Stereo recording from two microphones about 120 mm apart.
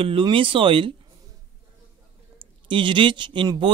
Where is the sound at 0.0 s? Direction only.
45° right (ahead or behind).